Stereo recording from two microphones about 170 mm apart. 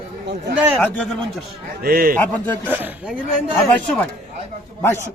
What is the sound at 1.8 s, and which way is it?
Speech, 60° right (ahead or behind).